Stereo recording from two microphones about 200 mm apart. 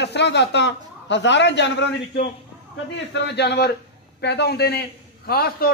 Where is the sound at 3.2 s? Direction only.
55° left (ahead or behind).